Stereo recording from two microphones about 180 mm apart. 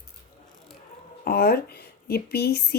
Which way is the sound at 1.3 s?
60° left (ahead or behind).